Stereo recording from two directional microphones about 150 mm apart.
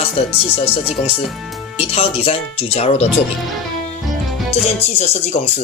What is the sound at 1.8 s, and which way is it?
Speech, 40° left (ahead or behind).